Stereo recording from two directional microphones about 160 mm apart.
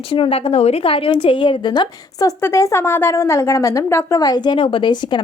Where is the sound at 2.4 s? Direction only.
15° left (ahead or behind).